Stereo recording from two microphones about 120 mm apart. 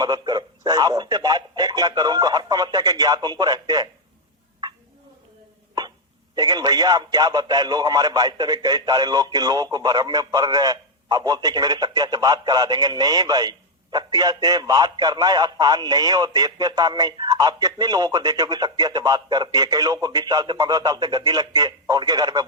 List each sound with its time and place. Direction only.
0.0 s speech: 35° right (ahead or behind)
6.3 s speech: 35° right (ahead or behind)